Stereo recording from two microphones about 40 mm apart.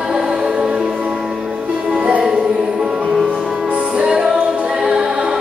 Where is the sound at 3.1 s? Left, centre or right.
Centre.